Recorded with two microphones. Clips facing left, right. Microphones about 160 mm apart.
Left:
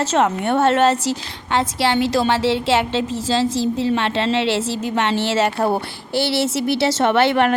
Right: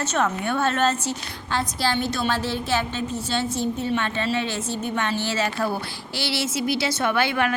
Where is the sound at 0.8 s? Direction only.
75° left (ahead or behind).